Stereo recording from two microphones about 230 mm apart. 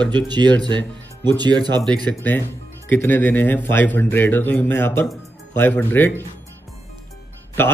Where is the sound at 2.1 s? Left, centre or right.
Centre.